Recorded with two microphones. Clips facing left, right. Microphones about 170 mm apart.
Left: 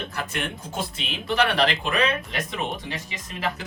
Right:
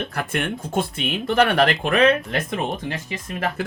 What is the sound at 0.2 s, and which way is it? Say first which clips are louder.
Speech: right 5 dB; 55° right (ahead or behind).